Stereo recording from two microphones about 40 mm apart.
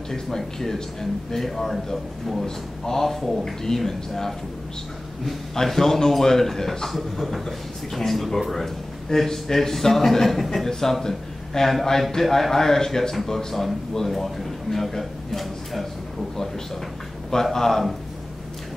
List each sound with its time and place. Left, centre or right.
0.1 s a man's voice: centre
17.3 s a man's voice: centre